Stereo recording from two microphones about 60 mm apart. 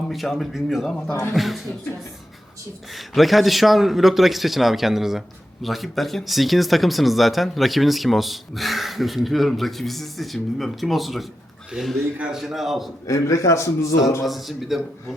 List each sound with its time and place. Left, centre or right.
0.1 s speech: centre
1.4 s speech: centre
2.9 s speech: centre
13.1 s a man's voice: left
14.3 s speech: centre